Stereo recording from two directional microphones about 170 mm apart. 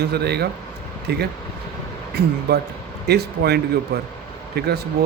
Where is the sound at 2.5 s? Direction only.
70° right (ahead or behind).